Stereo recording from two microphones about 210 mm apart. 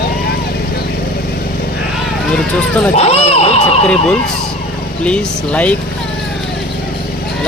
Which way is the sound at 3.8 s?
5° left (ahead or behind).